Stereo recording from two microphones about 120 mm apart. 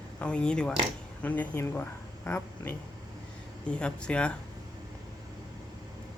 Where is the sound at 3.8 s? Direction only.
10° left (ahead or behind).